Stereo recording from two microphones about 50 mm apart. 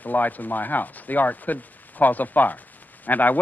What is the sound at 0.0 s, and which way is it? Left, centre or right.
Speech, left.